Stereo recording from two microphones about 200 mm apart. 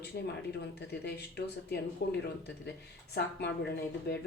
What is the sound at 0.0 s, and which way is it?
Speech, 55° left (ahead or behind).